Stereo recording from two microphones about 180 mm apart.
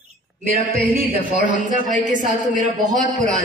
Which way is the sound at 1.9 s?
45° right (ahead or behind).